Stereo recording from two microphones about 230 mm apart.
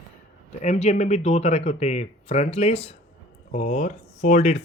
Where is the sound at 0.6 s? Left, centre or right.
Left.